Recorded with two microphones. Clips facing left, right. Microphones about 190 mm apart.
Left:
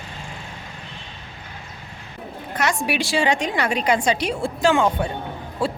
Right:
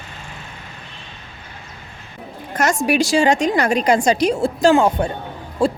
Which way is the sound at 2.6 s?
45° right (ahead or behind).